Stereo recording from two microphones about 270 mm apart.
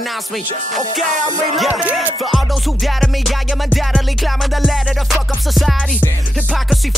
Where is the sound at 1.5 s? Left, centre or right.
Centre.